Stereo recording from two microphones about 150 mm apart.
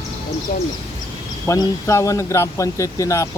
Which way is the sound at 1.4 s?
20° left (ahead or behind).